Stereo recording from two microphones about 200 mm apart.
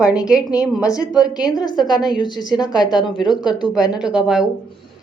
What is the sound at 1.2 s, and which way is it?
A woman's voice, 20° left (ahead or behind).